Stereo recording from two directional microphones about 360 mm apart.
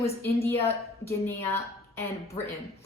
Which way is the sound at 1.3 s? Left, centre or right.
Centre.